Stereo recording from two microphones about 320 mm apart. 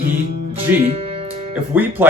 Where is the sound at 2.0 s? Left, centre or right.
Centre.